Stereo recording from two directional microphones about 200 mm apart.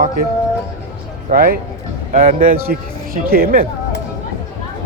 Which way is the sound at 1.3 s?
45° right (ahead or behind).